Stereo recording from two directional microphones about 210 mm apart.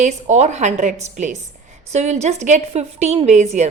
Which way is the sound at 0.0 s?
35° right (ahead or behind).